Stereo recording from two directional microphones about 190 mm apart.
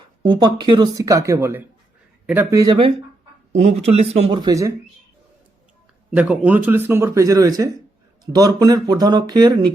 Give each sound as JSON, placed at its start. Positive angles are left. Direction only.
{"t": 0.2, "sound": "a man's voice", "side_deg": -25}
{"t": 3.5, "sound": "speech", "side_deg": -35}
{"t": 4.4, "sound": "speech", "side_deg": -20}
{"t": 6.1, "sound": "a man's voice", "side_deg": -10}